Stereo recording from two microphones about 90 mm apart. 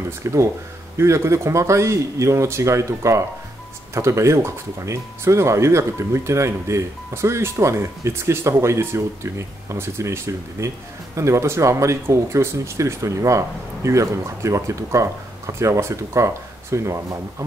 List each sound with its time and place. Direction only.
0.2 s speech: 35° right (ahead or behind)